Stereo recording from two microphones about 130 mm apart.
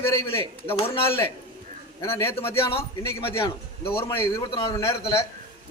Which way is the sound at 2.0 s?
20° left (ahead or behind).